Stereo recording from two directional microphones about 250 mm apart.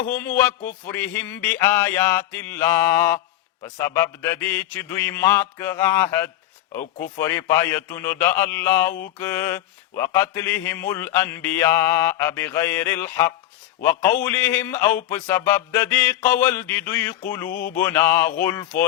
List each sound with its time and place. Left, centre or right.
0.1 s speech: centre
17.5 s mantra: left
17.7 s speech: centre